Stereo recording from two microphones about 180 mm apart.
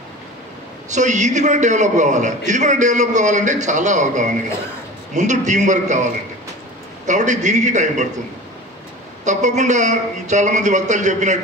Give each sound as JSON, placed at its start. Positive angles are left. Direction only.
{"t": 0.8, "sound": "a man's voice", "side_deg": -40}
{"t": 7.1, "sound": "a man's voice", "side_deg": -40}
{"t": 9.2, "sound": "a man's voice", "side_deg": -40}